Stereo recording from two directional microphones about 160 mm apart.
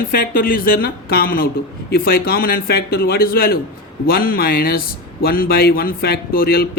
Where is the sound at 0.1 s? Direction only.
65° left (ahead or behind).